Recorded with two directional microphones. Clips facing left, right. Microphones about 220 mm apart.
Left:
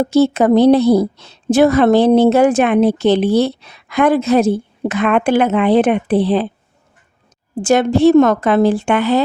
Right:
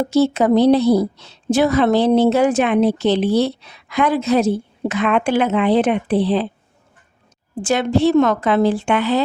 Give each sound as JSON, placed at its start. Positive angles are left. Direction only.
{"t": 0.1, "sound": "a woman's voice", "side_deg": 55}
{"t": 7.5, "sound": "a woman's voice", "side_deg": 45}